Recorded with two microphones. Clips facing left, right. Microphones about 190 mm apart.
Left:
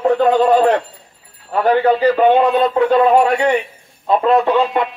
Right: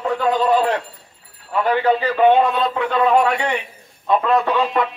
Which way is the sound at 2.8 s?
35° left (ahead or behind).